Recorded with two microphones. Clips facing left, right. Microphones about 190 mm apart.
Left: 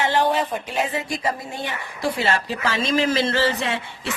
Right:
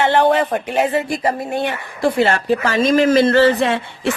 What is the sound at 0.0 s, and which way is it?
Speech, 65° right (ahead or behind).